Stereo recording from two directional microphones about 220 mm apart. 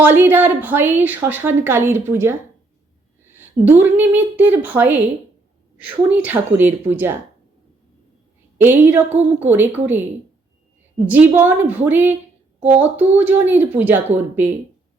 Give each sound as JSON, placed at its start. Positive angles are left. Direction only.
{"t": 0.0, "sound": "a woman's voice", "side_deg": -10}
{"t": 3.3, "sound": "a woman's voice", "side_deg": -10}
{"t": 6.1, "sound": "a woman's voice", "side_deg": -5}
{"t": 8.5, "sound": "a woman's voice", "side_deg": -10}
{"t": 9.0, "sound": "a woman's voice", "side_deg": -30}
{"t": 9.5, "sound": "a woman's voice", "side_deg": -10}
{"t": 11.0, "sound": "a woman's voice", "side_deg": -10}